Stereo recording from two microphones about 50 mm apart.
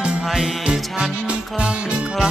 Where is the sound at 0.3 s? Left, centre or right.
Centre.